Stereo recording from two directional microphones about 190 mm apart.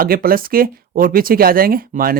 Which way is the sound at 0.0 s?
50° right (ahead or behind).